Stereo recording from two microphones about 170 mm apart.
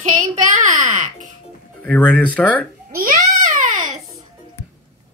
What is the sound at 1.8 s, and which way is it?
Speech, 10° left (ahead or behind).